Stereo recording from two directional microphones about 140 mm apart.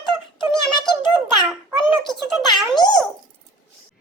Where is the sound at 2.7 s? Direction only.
30° left (ahead or behind).